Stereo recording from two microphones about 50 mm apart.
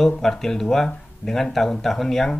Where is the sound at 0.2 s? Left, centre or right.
Centre.